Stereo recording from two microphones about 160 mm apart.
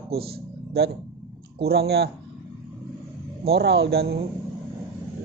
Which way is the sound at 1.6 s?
90° right.